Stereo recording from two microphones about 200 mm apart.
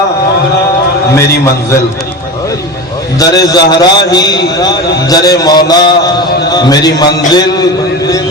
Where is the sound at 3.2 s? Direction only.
20° left (ahead or behind).